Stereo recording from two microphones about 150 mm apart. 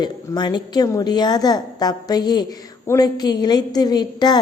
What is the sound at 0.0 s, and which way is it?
A woman's voice, 30° left (ahead or behind).